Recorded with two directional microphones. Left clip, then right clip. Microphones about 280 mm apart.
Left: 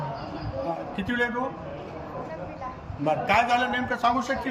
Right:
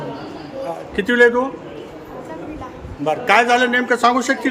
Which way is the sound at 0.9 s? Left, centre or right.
Centre.